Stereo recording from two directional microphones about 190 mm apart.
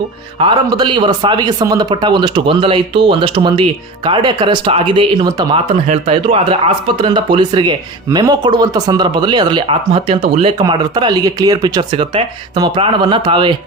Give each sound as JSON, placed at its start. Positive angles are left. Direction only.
{"t": 0.3, "sound": "a man's voice", "side_deg": -25}